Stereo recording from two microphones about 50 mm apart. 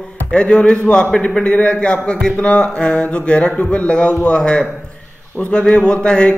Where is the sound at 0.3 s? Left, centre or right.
Centre.